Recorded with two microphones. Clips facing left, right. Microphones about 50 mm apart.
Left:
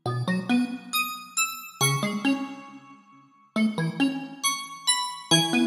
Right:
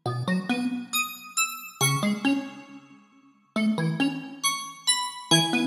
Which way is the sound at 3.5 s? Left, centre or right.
Centre.